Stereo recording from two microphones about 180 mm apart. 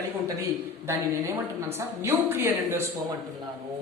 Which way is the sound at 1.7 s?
15° right (ahead or behind).